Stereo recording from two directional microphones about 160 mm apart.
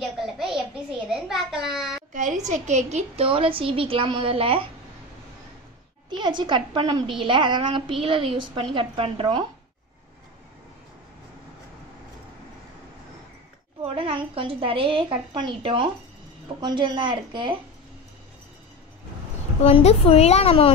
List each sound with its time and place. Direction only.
1.0 s a child's voice: 5° right (ahead or behind)
2.1 s a woman's voice: 50° right (ahead or behind)
6.0 s a woman's voice: 30° right (ahead or behind)
13.8 s a woman's voice: 35° right (ahead or behind)
19.6 s a woman's voice: 40° left (ahead or behind)